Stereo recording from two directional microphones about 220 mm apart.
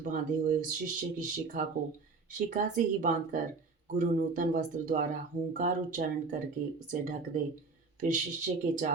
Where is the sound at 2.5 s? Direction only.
35° right (ahead or behind).